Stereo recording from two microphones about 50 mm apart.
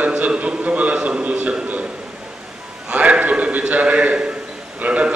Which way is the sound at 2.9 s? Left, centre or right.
Right.